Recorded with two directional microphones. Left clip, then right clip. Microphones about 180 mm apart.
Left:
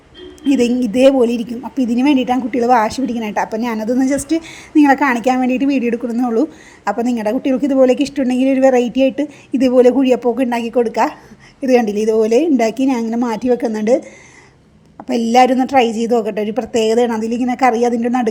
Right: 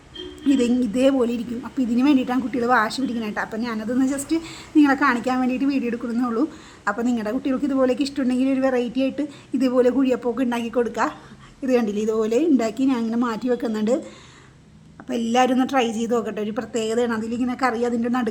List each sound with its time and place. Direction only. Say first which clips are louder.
0.9 s a woman's voice: left 10 dB; 20° left (ahead or behind)